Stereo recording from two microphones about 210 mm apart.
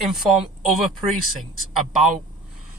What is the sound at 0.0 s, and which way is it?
Speech, centre (ahead or behind).